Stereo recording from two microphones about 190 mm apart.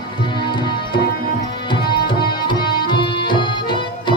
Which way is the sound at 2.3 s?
25° left (ahead or behind).